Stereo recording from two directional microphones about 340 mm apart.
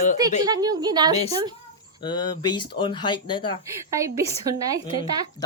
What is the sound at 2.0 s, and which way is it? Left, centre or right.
Speech, centre.